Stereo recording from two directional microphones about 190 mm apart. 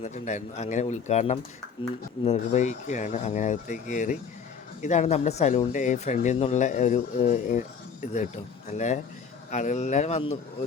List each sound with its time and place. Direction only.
0.0 s speech: 40° left (ahead or behind)
9.5 s speech: 40° left (ahead or behind)